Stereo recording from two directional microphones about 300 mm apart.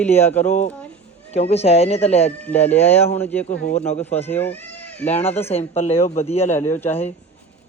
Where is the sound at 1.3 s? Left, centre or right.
Left.